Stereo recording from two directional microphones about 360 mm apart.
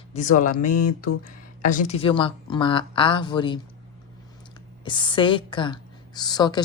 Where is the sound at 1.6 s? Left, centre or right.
Left.